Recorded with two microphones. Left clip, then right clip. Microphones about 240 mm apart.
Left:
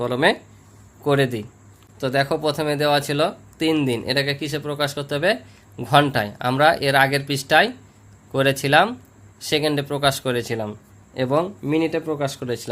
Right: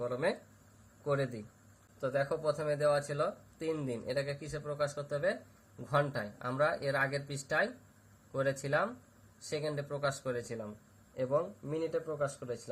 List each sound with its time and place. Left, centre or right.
0.0 s speech: left